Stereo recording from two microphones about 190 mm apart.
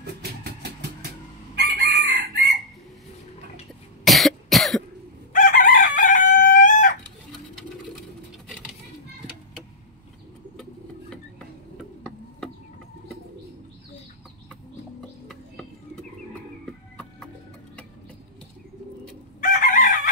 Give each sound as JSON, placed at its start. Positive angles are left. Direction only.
{"t": 0.0, "sound": "vehicle", "side_deg": -55}
{"t": 1.5, "sound": "chicken", "side_deg": -60}
{"t": 4.0, "sound": "cough", "side_deg": 0}
{"t": 5.3, "sound": "chicken", "side_deg": 45}
{"t": 10.6, "sound": "a sound", "side_deg": 5}
{"t": 15.2, "sound": "a sound", "side_deg": 5}
{"t": 16.9, "sound": "music", "side_deg": 5}
{"t": 19.4, "sound": "chicken", "side_deg": 45}